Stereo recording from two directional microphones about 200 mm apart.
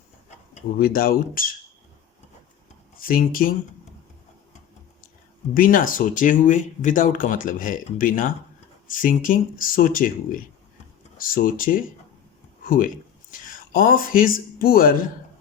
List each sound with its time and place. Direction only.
0.8 s speech: 45° left (ahead or behind)
3.0 s speech: 45° left (ahead or behind)
5.5 s speech: 45° left (ahead or behind)